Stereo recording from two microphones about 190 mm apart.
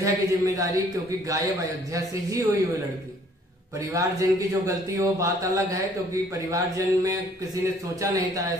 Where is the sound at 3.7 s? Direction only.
15° right (ahead or behind).